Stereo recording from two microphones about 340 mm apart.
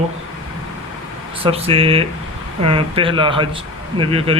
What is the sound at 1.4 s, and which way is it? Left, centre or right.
Speech, centre.